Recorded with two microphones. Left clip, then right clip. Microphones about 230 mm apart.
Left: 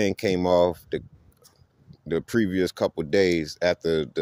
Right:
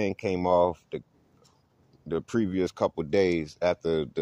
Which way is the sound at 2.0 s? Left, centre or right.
Left.